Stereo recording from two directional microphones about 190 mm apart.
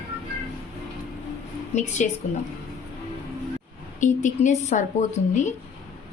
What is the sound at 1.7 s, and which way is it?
Speech, 35° left (ahead or behind).